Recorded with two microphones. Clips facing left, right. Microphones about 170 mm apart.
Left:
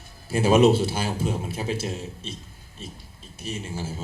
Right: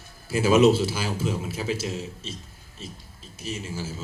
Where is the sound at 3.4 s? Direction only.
55° left (ahead or behind).